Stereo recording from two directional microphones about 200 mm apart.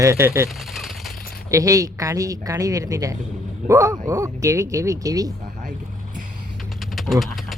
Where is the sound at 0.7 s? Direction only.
Centre (ahead or behind).